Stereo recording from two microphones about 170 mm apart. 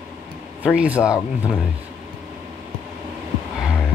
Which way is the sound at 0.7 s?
5° right (ahead or behind).